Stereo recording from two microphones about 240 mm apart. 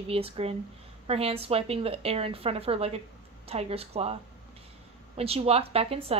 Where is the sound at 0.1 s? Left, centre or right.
Right.